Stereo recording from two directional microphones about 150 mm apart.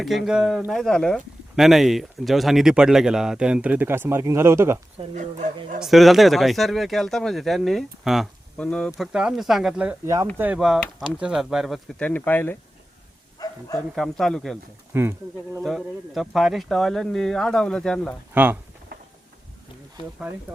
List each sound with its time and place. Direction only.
0.0 s speech: centre (ahead or behind); by 4.8 s 15° right (ahead or behind)
5.1 s speech: 55° right (ahead or behind)
5.8 s speech: centre (ahead or behind)
13.4 s speech: 25° left (ahead or behind)
13.9 s speech: centre (ahead or behind)
14.9 s speech: 15° right (ahead or behind)
15.6 s speech: centre (ahead or behind)